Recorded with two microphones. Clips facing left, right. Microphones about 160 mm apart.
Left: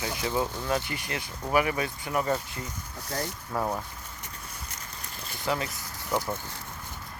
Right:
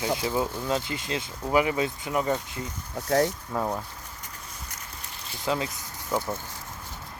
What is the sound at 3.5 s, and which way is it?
Speech, centre (ahead or behind).